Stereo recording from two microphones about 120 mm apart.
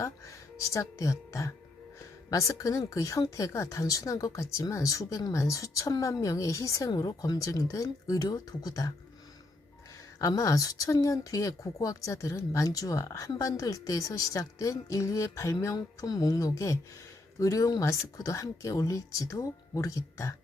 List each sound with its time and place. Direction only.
0.0 s speech: 25° left (ahead or behind)
10.2 s speech: 30° left (ahead or behind)